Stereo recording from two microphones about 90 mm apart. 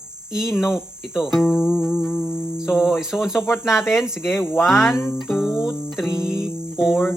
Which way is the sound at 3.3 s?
25° left (ahead or behind).